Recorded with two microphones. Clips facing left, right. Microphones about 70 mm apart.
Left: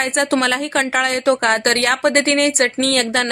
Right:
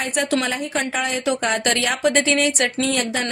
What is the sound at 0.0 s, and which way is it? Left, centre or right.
A woman's voice, left.